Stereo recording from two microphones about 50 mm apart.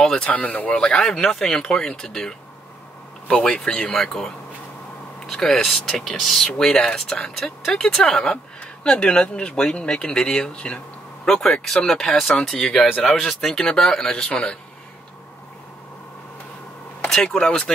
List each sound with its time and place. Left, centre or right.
0.1 s speech: left
0.7 s speech: centre
17.1 s speech: centre